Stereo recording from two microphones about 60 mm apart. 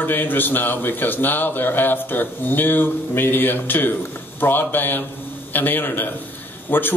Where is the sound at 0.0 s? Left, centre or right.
Left.